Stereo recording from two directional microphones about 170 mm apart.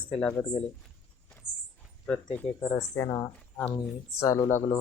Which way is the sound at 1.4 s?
45° right (ahead or behind).